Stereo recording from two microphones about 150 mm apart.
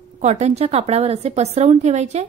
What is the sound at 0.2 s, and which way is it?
A woman's voice, 50° right (ahead or behind).